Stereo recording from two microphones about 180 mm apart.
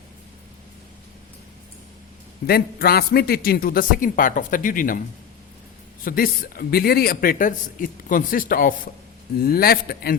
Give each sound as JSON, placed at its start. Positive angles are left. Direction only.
{"t": 2.5, "sound": "a man's voice", "side_deg": 55}
{"t": 6.1, "sound": "a man's voice", "side_deg": 55}